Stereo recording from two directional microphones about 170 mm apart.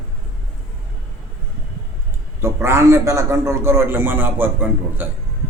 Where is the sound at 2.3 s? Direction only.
15° right (ahead or behind).